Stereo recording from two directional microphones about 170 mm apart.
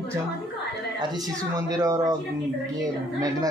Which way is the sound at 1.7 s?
20° right (ahead or behind).